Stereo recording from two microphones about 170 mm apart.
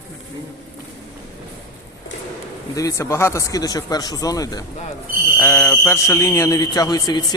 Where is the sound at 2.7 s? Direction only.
20° left (ahead or behind).